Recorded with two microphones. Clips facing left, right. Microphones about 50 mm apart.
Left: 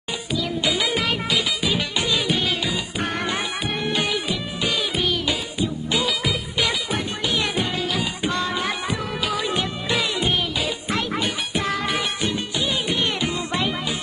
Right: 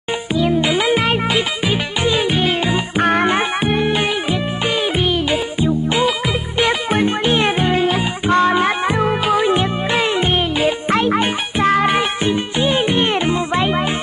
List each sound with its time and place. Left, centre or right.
0.4 s music: right